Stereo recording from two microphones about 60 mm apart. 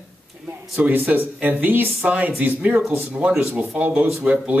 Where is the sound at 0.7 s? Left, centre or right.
Right.